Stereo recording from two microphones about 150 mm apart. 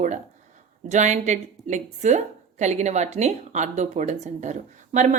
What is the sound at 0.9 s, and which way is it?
A woman's voice, 50° right (ahead or behind).